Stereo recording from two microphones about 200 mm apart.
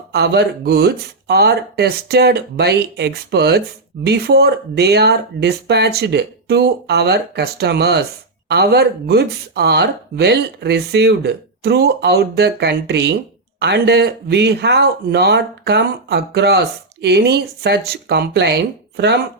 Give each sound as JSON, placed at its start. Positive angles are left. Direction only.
{"t": 0.1, "sound": "speech", "side_deg": -55}